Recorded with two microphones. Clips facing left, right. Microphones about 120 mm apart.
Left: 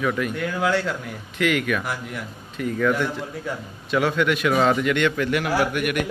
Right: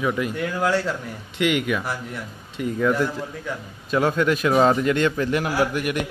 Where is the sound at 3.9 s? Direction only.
35° right (ahead or behind).